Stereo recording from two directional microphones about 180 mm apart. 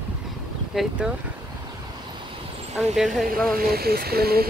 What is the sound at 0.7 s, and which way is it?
Speech, centre (ahead or behind).